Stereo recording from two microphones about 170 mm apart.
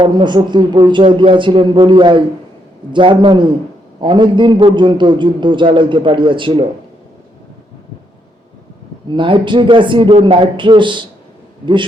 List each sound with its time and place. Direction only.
0.0 s a man's voice: 25° right (ahead or behind)
9.0 s a man's voice: 30° right (ahead or behind)